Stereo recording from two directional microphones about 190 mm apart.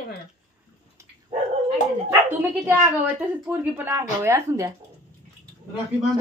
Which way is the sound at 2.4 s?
10° right (ahead or behind).